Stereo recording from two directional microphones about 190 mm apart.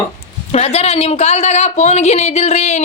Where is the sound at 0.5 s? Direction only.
35° left (ahead or behind).